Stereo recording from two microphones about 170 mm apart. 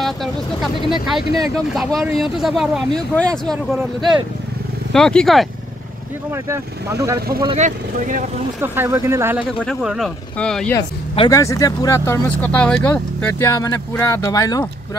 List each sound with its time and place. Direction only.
0.0 s speech: centre (ahead or behind)
4.9 s speech: 5° left (ahead or behind)
6.3 s speech: 15° right (ahead or behind)
7.5 s speech: 45° right (ahead or behind)
8.5 s speech: 15° right (ahead or behind); by 10.8 s 5° left (ahead or behind)
11.1 s speech: 20° left (ahead or behind)